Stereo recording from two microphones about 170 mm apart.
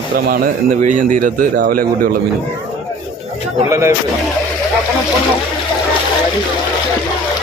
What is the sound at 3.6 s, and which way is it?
Speech, 15° right (ahead or behind).